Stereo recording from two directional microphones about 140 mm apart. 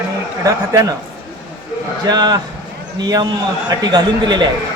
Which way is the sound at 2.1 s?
30° right (ahead or behind).